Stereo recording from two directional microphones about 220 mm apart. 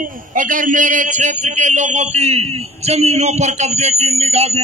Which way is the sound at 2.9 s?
30° right (ahead or behind).